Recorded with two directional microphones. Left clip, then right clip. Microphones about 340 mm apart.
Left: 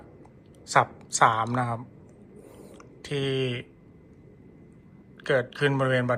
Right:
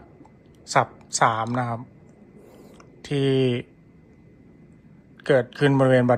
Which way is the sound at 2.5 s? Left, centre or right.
Centre.